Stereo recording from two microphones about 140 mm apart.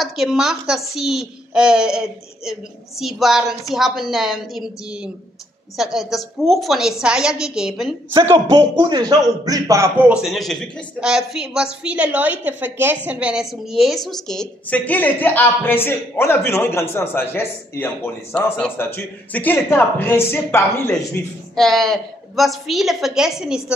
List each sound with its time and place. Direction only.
0.0 s a child's voice: centre (ahead or behind)
8.5 s speech: 30° right (ahead or behind)
10.2 s a man's voice: centre (ahead or behind); by 21.2 s 15° left (ahead or behind)
21.5 s a child's voice: 5° left (ahead or behind)